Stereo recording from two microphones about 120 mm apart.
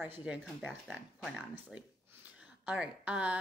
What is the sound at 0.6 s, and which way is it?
Speech, 5° right (ahead or behind).